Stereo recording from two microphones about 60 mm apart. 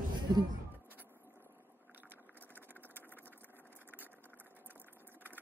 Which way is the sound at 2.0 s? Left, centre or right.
Right.